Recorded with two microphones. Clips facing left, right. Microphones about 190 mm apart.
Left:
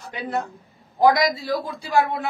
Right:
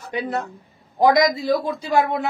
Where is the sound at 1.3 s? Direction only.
20° right (ahead or behind).